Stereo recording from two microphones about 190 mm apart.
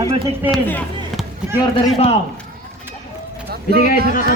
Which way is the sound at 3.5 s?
55° right (ahead or behind).